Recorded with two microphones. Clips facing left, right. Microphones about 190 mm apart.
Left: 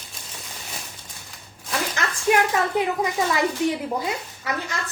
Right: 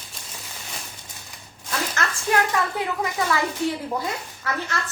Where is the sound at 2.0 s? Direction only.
15° left (ahead or behind).